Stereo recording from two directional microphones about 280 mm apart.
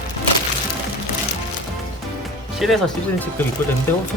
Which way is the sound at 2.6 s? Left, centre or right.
Centre.